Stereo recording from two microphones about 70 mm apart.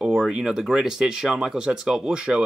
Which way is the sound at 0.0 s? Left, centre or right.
Centre.